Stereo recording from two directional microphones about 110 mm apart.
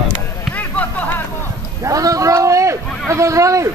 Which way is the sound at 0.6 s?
15° left (ahead or behind).